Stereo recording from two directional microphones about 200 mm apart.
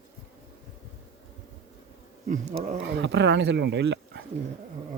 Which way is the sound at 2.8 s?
60° right (ahead or behind).